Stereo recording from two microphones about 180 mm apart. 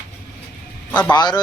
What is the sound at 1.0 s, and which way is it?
Speech, 25° left (ahead or behind).